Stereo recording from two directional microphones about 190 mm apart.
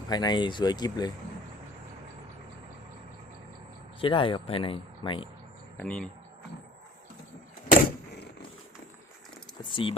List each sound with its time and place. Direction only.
0.1 s speech: 20° left (ahead or behind)
4.0 s speech: 25° left (ahead or behind)
5.7 s speech: 5° left (ahead or behind)
7.7 s vehicle: 60° left (ahead or behind)
9.8 s speech: 25° left (ahead or behind)